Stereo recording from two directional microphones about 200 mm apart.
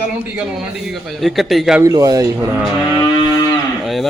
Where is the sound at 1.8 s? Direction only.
15° right (ahead or behind).